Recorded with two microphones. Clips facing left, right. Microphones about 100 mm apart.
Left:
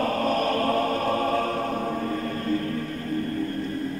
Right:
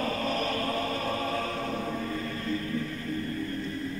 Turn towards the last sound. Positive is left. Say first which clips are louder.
# left 5 dB
turn(degrees=50)  # may be behind; listen again after turning